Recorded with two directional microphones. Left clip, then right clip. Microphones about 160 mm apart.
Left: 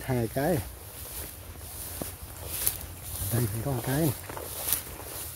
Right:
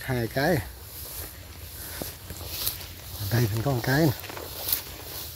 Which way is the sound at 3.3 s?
20° right (ahead or behind).